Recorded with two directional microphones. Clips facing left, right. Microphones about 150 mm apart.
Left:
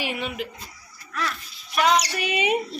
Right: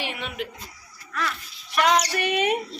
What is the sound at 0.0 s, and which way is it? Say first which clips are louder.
Speech: left 2 dB; 5° left (ahead or behind).